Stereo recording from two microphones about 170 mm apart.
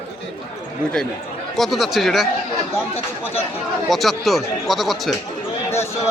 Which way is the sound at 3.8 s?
Centre (ahead or behind).